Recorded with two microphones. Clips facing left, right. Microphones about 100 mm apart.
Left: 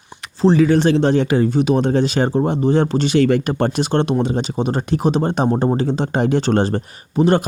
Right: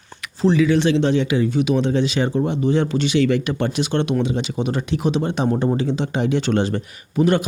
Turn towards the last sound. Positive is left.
turn(degrees=35)  # may be behind; listen again after turning